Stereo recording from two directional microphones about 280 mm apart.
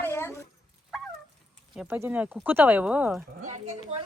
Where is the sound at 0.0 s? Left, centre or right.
Centre.